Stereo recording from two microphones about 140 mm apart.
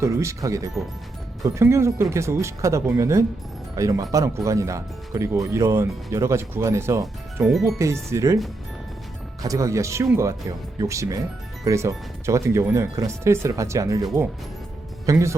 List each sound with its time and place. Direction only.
0.0 s speech: 20° right (ahead or behind)
9.4 s speech: 25° right (ahead or behind)